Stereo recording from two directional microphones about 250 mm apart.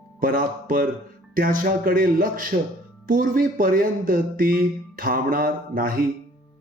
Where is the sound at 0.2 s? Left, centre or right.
Right.